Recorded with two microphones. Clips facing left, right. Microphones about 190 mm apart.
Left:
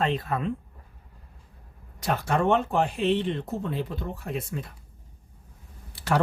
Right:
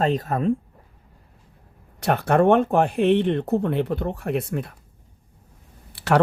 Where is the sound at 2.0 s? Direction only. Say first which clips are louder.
Right 7 dB; 60° right (ahead or behind).